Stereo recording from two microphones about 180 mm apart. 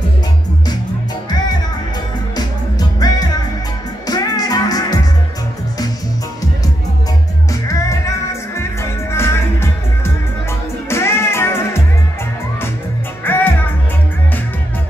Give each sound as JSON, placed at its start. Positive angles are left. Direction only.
{"t": 2.3, "sound": "music", "side_deg": 20}
{"t": 7.6, "sound": "music", "side_deg": 15}
{"t": 13.2, "sound": "music", "side_deg": 10}